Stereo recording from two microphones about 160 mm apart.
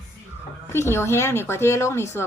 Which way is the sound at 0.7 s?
15° left (ahead or behind).